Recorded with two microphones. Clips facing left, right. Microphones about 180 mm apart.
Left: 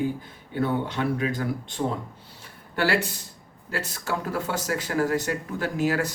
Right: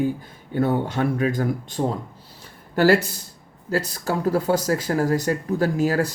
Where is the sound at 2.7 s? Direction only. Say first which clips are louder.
Right 7 dB; 40° right (ahead or behind).